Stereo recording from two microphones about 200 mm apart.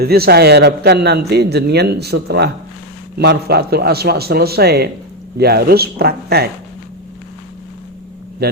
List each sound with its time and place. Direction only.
0.0 s a man's voice: 50° right (ahead or behind)
8.4 s a man's voice: 50° right (ahead or behind)